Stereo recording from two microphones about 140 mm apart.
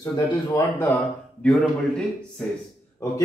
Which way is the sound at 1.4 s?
5° left (ahead or behind).